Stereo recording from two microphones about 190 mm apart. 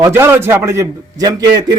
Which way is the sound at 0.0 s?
10° right (ahead or behind).